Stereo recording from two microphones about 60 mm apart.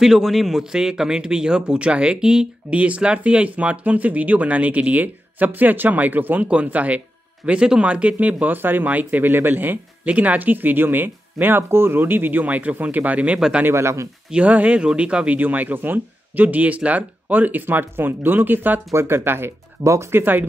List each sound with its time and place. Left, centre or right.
0.0 s speech: centre; by 8.5 s right
8.5 s speech: right
13.7 s speech: right
14.3 s speech: right
18.9 s speech: right
19.8 s speech: right
20.1 s speech: right